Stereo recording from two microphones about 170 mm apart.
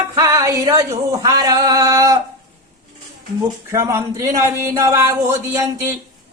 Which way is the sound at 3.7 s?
15° right (ahead or behind).